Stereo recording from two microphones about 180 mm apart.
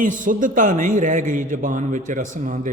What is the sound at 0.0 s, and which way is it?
A man's voice, 45° right (ahead or behind).